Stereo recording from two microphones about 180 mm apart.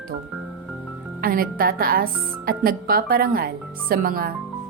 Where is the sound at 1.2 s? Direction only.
55° right (ahead or behind).